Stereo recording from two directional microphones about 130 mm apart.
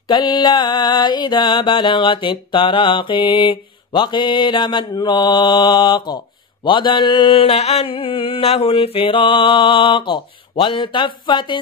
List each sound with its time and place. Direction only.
0.1 s mantra: 35° left (ahead or behind)